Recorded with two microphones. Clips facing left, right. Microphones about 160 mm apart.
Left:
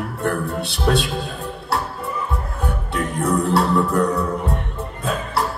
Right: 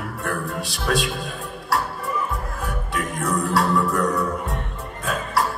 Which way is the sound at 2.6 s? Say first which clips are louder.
Left 5 dB; 30° left (ahead or behind).